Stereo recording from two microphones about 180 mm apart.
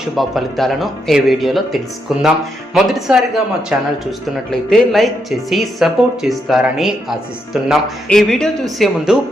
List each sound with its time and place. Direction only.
0.0 s speech: centre (ahead or behind)